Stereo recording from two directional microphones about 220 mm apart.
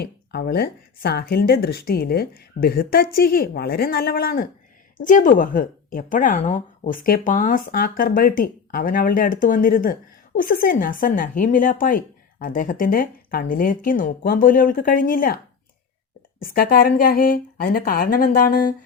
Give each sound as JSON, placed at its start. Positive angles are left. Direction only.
{"t": 0.0, "sound": "speech", "side_deg": 45}
{"t": 16.4, "sound": "speech", "side_deg": 40}